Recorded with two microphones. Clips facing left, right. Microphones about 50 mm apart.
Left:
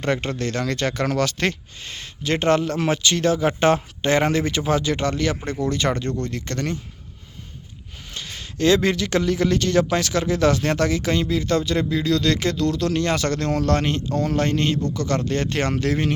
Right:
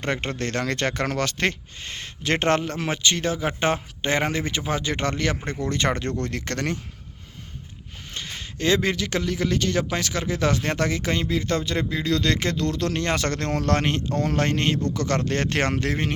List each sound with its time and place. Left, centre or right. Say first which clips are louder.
0.0 s speech: left 3 dB; right
2.2 s speech: left 2 dB; right
2.9 s speech: left 3 dB; right
4.7 s speech: left 4 dB; right
6.2 s speech: left 1 dB; right
8.1 s a sound: even; right
8.5 s speech: left 4 dB; centre; by 15.7 s right
15.7 s speech: left 3 dB; right